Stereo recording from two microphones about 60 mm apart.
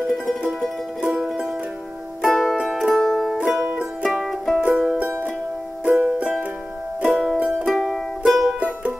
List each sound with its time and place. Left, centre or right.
0.0 s music: centre
1.0 s music: centre
2.2 s music: centre
2.5 s music: centre
2.8 s music: centre
4.6 s music: centre
7.6 s music: centre
8.5 s music: centre